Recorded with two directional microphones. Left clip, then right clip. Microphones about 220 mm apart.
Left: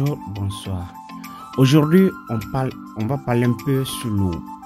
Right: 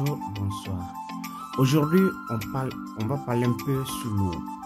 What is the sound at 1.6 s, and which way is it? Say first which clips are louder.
Speech: left 7 dB; 25° left (ahead or behind).